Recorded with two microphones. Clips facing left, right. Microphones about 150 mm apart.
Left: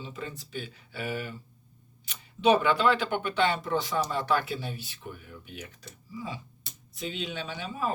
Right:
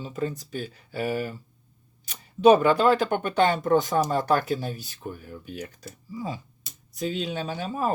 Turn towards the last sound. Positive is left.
turn(degrees=-45)  # may be behind; listen again after turning